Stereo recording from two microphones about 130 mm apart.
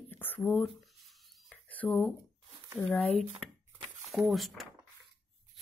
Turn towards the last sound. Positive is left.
turn(degrees=0)  # may be behind; listen again after turning